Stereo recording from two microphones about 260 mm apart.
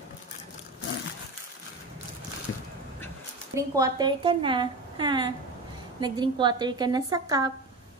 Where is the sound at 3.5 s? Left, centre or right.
Centre.